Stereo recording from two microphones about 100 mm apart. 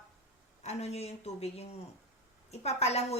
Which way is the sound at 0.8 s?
90° left.